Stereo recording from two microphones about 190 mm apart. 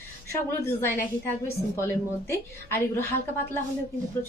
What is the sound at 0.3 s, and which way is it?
A woman's voice, 10° left (ahead or behind).